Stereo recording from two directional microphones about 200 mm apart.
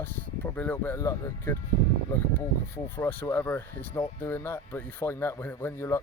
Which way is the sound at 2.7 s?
10° left (ahead or behind).